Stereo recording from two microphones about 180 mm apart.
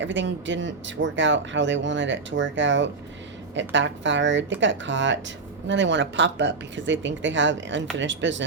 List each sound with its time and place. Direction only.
0.0 s speech: 90° right